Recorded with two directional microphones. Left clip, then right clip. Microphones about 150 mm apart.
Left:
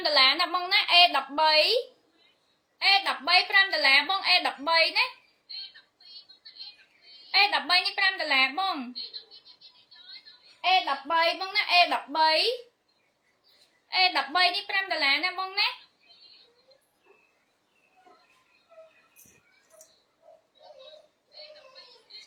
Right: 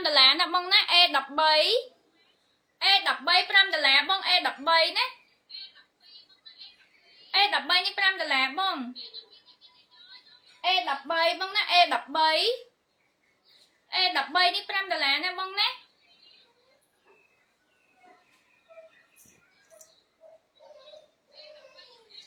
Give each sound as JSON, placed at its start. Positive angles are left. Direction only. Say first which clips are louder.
{"t": 0.0, "sound": "a sound", "louder": "right 1 dB", "side_deg": -30}
{"t": 2.7, "sound": "a woman's voice", "louder": "even", "side_deg": -25}
{"t": 7.3, "sound": "a woman's voice", "louder": "left 1 dB", "side_deg": -25}
{"t": 10.6, "sound": "a woman's voice", "louder": "left 2 dB", "side_deg": -20}
{"t": 13.9, "sound": "a woman's voice", "louder": "left 1 dB", "side_deg": -20}